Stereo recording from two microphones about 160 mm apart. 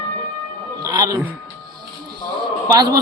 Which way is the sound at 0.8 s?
25° right (ahead or behind).